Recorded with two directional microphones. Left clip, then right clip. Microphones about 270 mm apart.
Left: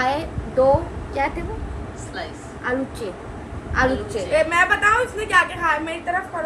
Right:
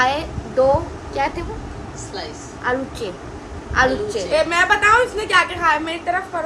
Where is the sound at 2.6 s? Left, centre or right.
Centre.